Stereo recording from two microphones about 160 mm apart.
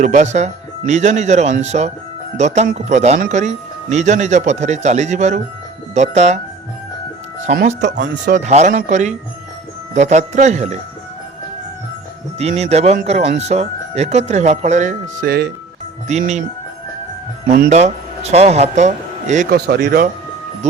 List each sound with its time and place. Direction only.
0.0 s speech: 45° right (ahead or behind)
7.8 s speech: 90° right
8.3 s speech: 45° right (ahead or behind)
12.4 s speech: 40° right (ahead or behind)
17.7 s speech: 45° right (ahead or behind)
19.5 s speech: 75° right (ahead or behind)